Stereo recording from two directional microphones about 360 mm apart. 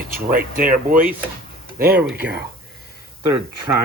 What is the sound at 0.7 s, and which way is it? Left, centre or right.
Speech, right.